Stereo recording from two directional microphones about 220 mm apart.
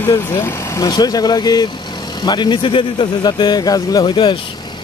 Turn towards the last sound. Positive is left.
turn(degrees=20)  # may be behind; listen again after turning